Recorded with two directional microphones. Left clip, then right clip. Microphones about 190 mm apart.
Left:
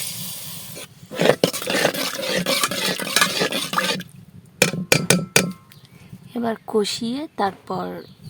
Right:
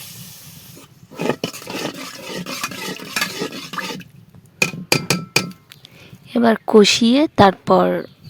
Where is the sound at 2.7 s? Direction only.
20° left (ahead or behind).